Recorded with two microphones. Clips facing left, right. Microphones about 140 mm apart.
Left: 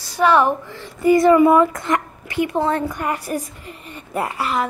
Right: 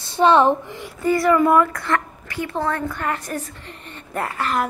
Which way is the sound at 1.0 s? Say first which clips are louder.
Left 5 dB; 20° left (ahead or behind).